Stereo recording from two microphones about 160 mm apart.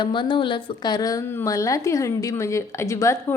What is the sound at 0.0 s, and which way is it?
A woman's voice, 30° left (ahead or behind).